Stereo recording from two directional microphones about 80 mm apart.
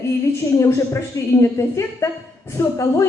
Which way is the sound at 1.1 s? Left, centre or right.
Left.